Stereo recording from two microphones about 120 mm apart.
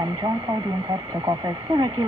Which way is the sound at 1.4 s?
40° right (ahead or behind).